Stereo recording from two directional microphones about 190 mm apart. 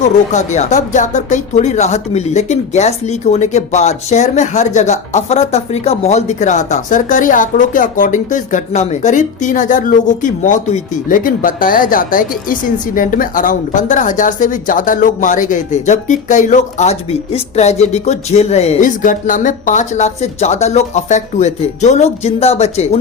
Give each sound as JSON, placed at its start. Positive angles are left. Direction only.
{"t": 0.3, "sound": "speech", "side_deg": 40}